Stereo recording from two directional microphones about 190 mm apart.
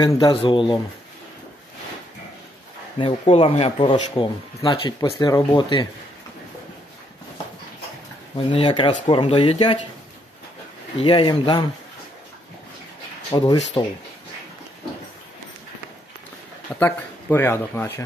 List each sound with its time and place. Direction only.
0.0 s speech: 25° left (ahead or behind)
3.0 s speech: 30° left (ahead or behind)
8.5 s speech: 30° left (ahead or behind)
11.0 s speech: 25° left (ahead or behind)
13.3 s speech: 20° left (ahead or behind)
16.8 s speech: 10° left (ahead or behind)